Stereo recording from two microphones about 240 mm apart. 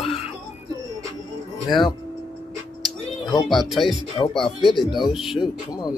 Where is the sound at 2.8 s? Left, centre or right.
Centre.